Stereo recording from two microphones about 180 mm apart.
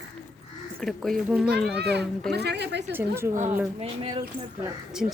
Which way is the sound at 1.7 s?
65° right (ahead or behind).